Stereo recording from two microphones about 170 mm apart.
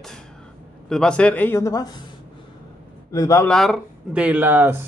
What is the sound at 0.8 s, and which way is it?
A man's voice, 5° left (ahead or behind).